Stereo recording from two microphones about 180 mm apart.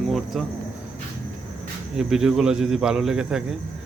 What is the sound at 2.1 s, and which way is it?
Speech, 5° right (ahead or behind).